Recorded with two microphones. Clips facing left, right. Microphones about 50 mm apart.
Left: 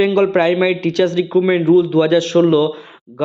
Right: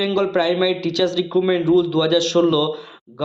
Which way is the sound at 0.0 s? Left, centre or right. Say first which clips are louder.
Left 5 dB; left.